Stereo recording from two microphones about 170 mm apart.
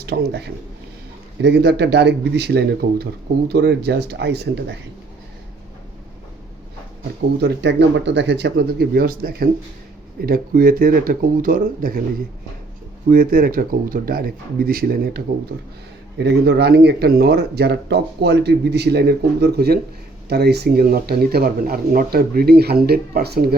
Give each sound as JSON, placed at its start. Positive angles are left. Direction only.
{"t": 0.0, "sound": "speech", "side_deg": -70}
{"t": 7.4, "sound": "speech", "side_deg": -90}
{"t": 13.1, "sound": "speech", "side_deg": -60}
{"t": 16.1, "sound": "speech", "side_deg": -80}